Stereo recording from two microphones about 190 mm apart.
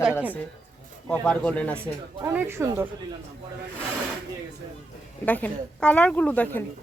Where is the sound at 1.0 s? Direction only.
5° left (ahead or behind).